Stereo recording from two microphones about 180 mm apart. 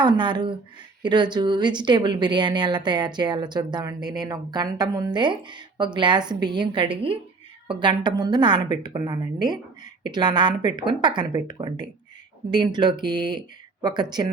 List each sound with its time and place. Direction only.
0.0 s a woman's voice: 25° right (ahead or behind)